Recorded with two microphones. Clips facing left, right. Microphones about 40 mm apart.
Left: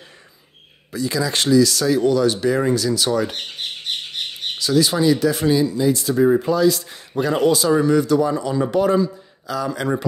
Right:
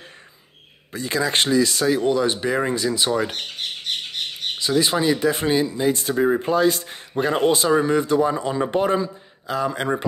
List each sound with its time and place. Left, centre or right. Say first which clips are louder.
0.9 s a man's voice: even; right
3.3 s squawk: even; centre
4.6 s a man's voice: left 2 dB; right